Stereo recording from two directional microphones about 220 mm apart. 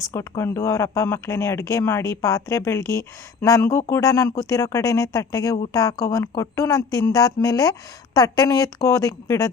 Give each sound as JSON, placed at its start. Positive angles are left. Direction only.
{"t": 0.1, "sound": "speech", "side_deg": 10}